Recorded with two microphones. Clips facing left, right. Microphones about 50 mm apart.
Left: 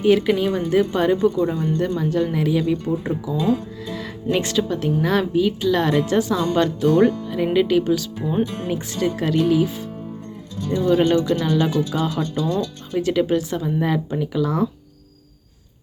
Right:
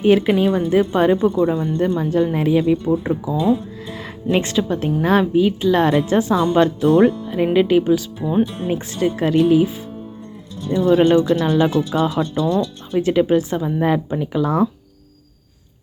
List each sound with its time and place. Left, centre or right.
0.0 s speech: right